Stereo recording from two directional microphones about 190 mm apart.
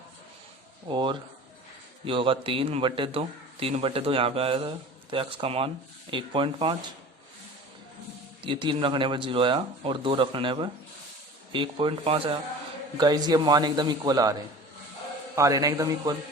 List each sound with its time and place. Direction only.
0.9 s a man's voice: 25° right (ahead or behind)
8.4 s a man's voice: 25° right (ahead or behind)
15.4 s a man's voice: 15° right (ahead or behind)